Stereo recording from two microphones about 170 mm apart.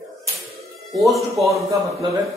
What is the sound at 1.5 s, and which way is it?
Speech, 20° right (ahead or behind).